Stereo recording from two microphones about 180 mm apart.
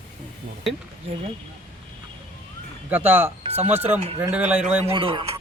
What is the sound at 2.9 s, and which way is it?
Speech, 10° right (ahead or behind).